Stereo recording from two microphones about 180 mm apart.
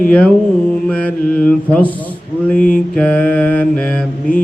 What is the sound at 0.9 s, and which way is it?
Mantra, 10° left (ahead or behind).